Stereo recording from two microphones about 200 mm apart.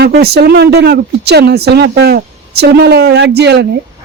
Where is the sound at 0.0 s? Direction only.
55° right (ahead or behind).